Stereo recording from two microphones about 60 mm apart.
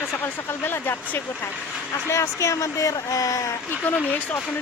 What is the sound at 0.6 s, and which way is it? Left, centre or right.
Speech, left.